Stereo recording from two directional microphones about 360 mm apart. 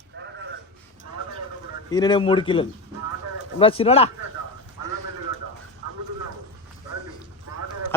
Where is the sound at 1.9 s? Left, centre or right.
Centre.